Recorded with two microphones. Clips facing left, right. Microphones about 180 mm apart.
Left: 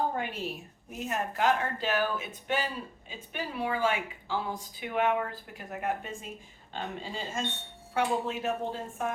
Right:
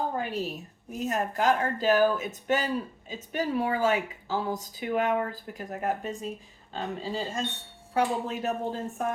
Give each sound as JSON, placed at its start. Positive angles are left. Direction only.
{"t": 0.2, "sound": "speech", "side_deg": -40}